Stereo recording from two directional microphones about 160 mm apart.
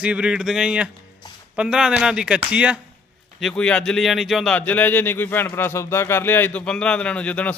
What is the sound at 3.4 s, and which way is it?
Speech, 5° left (ahead or behind).